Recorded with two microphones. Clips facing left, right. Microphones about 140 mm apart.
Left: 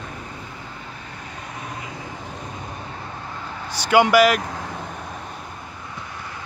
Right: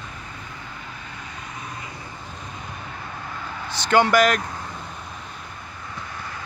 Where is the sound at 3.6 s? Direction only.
10° left (ahead or behind).